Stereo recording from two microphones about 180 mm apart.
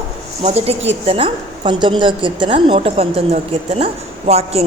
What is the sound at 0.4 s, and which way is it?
A woman's voice, 35° right (ahead or behind).